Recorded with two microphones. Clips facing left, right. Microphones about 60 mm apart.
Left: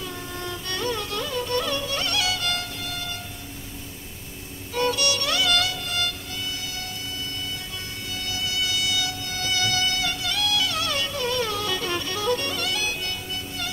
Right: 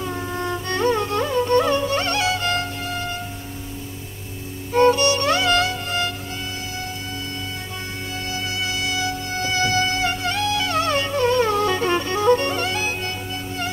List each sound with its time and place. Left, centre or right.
0.0 s music: right
4.7 s music: right
8.3 s music: right